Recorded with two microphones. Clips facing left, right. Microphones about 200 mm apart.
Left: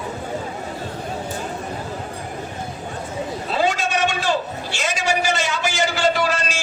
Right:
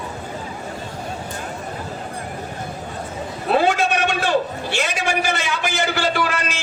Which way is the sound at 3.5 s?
60° right (ahead or behind).